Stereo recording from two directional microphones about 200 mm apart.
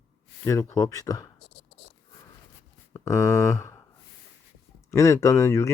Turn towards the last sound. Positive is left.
turn(degrees=10)  # may be behind; listen again after turning